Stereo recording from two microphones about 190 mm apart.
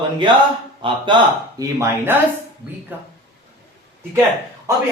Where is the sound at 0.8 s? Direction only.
25° right (ahead or behind).